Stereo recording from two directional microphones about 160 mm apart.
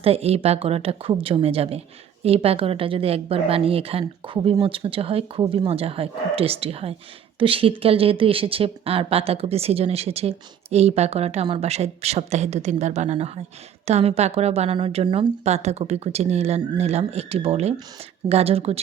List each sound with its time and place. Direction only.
0.0 s speech: 40° right (ahead or behind)
15.4 s speech: 40° right (ahead or behind)